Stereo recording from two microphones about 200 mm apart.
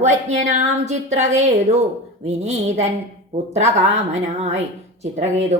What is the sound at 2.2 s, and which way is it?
Speech, 35° right (ahead or behind).